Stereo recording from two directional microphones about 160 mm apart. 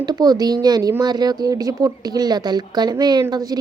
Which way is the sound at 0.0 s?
25° right (ahead or behind).